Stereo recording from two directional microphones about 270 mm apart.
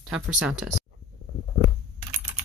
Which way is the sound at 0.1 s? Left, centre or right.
Centre.